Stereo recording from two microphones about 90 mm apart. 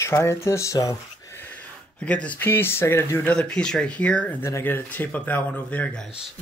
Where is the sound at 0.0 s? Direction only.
30° left (ahead or behind).